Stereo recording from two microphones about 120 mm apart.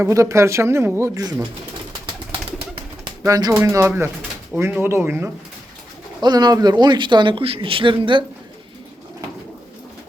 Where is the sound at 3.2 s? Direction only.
25° right (ahead or behind).